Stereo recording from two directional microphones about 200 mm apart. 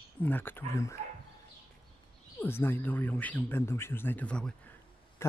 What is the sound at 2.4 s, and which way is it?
Speech, 10° left (ahead or behind).